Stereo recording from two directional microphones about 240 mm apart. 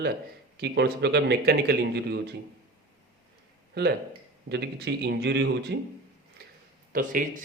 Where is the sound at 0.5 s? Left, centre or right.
Right.